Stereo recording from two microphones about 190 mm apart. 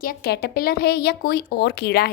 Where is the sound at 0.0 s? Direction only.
55° left (ahead or behind).